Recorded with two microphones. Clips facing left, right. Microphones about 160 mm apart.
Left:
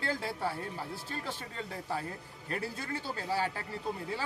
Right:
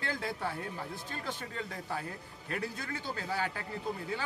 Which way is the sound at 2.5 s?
30° left (ahead or behind).